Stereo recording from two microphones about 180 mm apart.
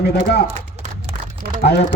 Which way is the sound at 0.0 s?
65° left (ahead or behind).